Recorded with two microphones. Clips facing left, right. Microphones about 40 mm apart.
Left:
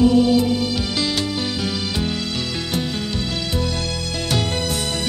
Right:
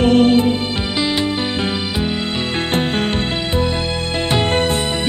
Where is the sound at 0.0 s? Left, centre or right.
Right.